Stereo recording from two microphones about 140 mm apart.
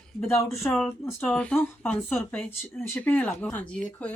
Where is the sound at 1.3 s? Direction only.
5° left (ahead or behind).